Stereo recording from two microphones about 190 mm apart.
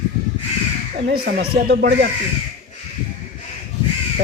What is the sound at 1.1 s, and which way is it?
Speech, 60° right (ahead or behind).